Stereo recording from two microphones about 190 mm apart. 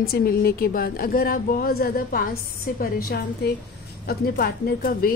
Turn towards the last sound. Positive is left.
turn(degrees=50)  # may be behind; listen again after turning